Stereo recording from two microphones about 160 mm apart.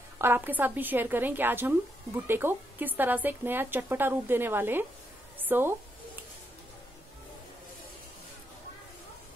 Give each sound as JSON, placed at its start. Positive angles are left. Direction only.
{"t": 0.2, "sound": "speech", "side_deg": -15}